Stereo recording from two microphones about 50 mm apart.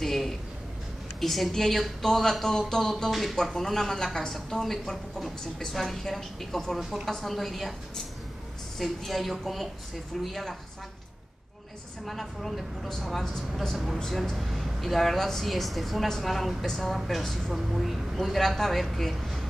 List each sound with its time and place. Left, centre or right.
0.0 s a sound: centre
1.2 s a woman's voice: centre
8.7 s a woman's voice: centre
12.1 s a woman's voice: centre
14.3 s a woman's voice: centre
17.6 s a woman's voice: centre